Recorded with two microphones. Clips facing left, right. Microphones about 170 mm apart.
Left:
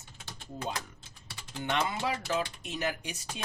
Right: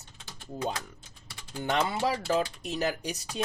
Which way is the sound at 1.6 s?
35° right (ahead or behind).